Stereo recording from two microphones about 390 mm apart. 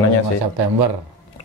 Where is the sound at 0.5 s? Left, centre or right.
Right.